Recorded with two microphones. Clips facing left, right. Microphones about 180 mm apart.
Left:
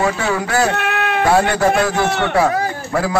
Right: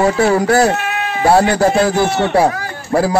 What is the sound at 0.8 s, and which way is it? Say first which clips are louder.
Cat: left 2 dB; 60° left (ahead or behind).